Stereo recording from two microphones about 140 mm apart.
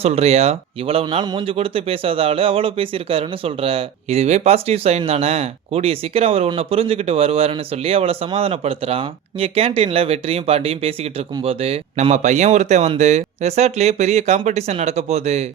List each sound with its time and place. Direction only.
0.0 s speech: 50° right (ahead or behind)